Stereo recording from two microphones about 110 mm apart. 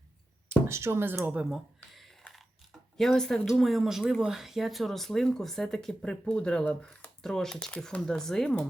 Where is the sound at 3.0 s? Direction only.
5° left (ahead or behind).